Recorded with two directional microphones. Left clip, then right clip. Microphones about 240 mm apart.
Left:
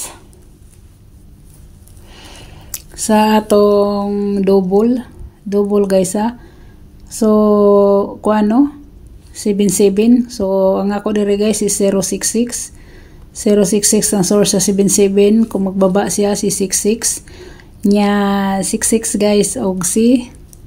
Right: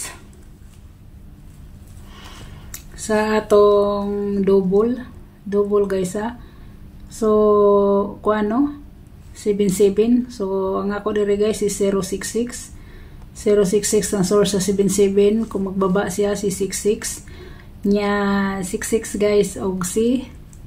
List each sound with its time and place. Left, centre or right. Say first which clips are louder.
2.7 s speech: left 6 dB; left